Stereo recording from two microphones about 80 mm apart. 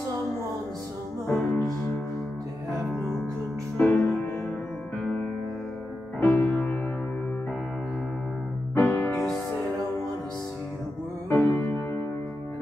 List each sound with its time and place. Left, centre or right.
1.2 s music: centre
3.7 s music: centre
8.7 s music: left
11.2 s music: left